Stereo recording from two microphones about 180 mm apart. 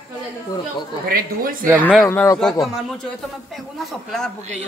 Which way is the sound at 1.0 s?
55° right (ahead or behind).